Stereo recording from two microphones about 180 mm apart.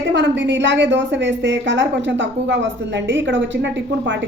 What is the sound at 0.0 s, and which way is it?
A woman's voice, 80° right.